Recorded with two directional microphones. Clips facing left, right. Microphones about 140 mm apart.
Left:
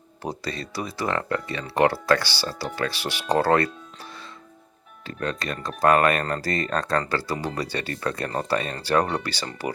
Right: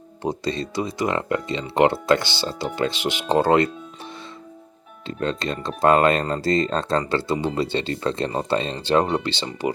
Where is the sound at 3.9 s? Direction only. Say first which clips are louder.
Right 4 dB; 25° right (ahead or behind).